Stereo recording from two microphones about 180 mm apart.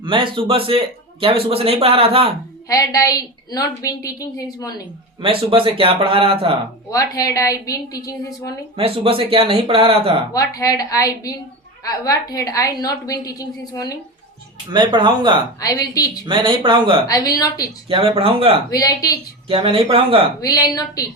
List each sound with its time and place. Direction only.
0.0 s a man's voice: 30° right (ahead or behind)
2.6 s a woman's voice: 20° left (ahead or behind)
5.2 s a man's voice: 30° right (ahead or behind)
6.9 s a woman's voice: 20° left (ahead or behind)
8.7 s a man's voice: 30° right (ahead or behind)
10.3 s a woman's voice: 20° left (ahead or behind)
14.7 s speech: 25° right (ahead or behind)
15.6 s a woman's voice: 20° left (ahead or behind)
16.2 s a man's voice: 25° right (ahead or behind)
18.7 s a woman's voice: 20° left (ahead or behind)
19.5 s a man's voice: 30° right (ahead or behind)
20.4 s a woman's voice: 20° left (ahead or behind)